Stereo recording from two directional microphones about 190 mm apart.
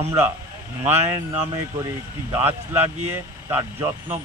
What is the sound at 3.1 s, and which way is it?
A man's voice, 15° right (ahead or behind).